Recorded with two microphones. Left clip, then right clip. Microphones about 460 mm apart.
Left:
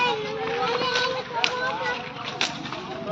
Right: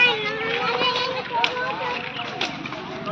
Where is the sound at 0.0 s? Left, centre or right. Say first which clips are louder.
Right 5 dB; centre.